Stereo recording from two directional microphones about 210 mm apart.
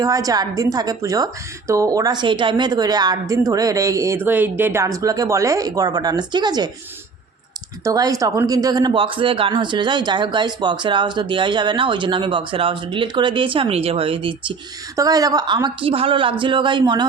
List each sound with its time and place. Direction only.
0.0 s a woman's voice: 15° right (ahead or behind)
7.9 s speech: 15° right (ahead or behind)